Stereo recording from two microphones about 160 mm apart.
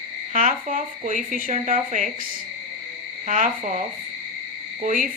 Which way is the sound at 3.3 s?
50° right (ahead or behind).